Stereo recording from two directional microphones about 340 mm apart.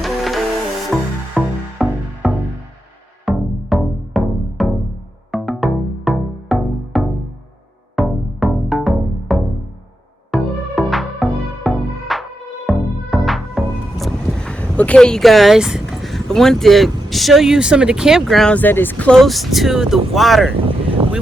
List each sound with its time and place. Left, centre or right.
0.0 s music: centre
20.7 s vehicle: centre